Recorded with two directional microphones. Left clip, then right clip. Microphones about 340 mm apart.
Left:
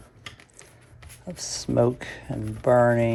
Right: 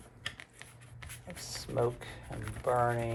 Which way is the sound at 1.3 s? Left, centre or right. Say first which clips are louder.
Left 11 dB; left.